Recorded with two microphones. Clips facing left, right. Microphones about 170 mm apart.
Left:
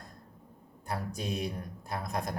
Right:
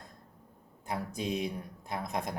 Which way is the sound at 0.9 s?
20° right (ahead or behind).